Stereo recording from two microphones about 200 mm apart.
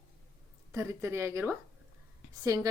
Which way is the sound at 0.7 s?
15° right (ahead or behind).